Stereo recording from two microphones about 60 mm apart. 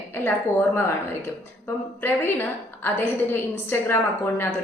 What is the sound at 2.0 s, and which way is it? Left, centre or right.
A woman's voice, left.